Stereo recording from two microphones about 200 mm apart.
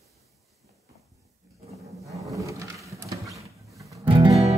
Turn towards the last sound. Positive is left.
turn(degrees=-25)  # may be behind; listen again after turning